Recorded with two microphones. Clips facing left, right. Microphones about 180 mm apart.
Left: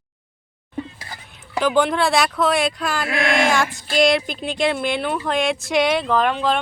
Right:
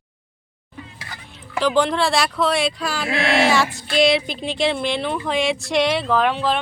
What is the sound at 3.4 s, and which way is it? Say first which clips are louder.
Speech: right 1 dB; centre (ahead or behind).